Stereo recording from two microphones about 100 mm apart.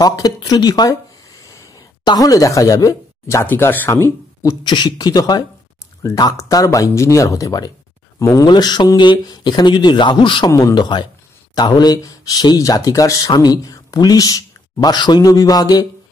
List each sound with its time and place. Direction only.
0.0 s speech: 40° left (ahead or behind)
1.4 s a sound: 30° left (ahead or behind)
2.0 s speech: 35° left (ahead or behind)
4.6 s speech: 45° left (ahead or behind)
8.5 s speech: 45° left (ahead or behind)